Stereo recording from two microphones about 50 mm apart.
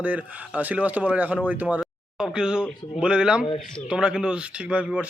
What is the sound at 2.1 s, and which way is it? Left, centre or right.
A man's voice, centre.